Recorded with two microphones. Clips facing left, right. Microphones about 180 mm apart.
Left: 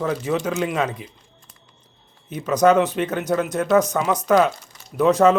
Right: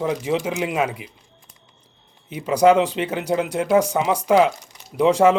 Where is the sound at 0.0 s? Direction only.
15° right (ahead or behind).